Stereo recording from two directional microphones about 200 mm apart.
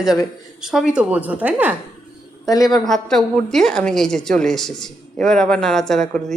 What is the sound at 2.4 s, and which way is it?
Speech, 20° left (ahead or behind).